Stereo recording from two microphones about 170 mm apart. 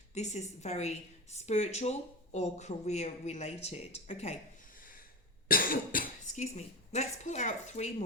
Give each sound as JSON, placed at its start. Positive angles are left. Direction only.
{"t": 0.1, "sound": "a woman's voice", "side_deg": 40}
{"t": 5.5, "sound": "speech", "side_deg": 55}